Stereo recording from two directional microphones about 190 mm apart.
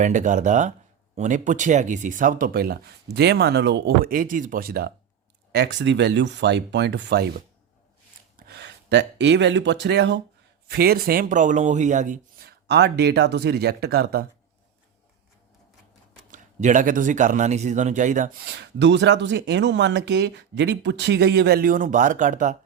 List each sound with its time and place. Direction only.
0.0 s a man's voice: 40° right (ahead or behind)
5.5 s speech: 65° right (ahead or behind)
10.7 s speech: 55° right (ahead or behind)
12.5 s speech: 65° right (ahead or behind)
16.3 s a man's voice: 40° right (ahead or behind)